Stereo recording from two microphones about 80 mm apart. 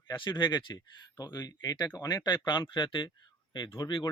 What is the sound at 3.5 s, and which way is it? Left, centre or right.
Speech, left.